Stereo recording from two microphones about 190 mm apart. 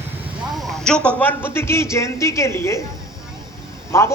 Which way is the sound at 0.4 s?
Centre (ahead or behind).